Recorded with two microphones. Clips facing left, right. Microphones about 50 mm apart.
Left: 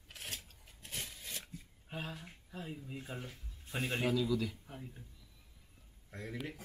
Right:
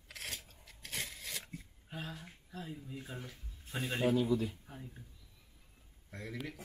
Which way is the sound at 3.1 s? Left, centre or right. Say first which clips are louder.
Left 1 dB; centre.